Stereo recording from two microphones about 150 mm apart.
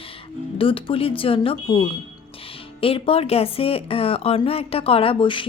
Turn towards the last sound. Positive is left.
turn(degrees=35)  # may be behind; listen again after turning